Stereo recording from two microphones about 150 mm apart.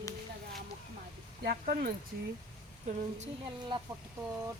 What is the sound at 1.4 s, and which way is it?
Speech, 70° right (ahead or behind).